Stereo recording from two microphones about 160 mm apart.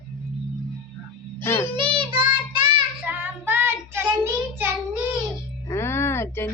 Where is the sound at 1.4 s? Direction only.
15° left (ahead or behind).